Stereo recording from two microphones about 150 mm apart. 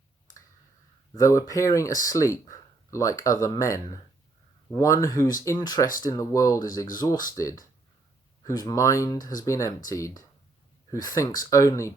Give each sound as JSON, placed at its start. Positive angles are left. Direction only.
{"t": 1.1, "sound": "speech", "side_deg": 20}